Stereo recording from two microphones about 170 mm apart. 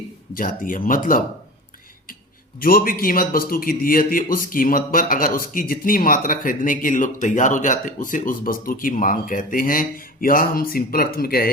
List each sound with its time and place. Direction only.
0.3 s speech: 55° left (ahead or behind)
2.6 s a man's voice: 55° left (ahead or behind)